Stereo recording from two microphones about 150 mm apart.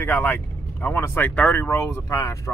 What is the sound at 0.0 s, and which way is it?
Speech, 15° left (ahead or behind).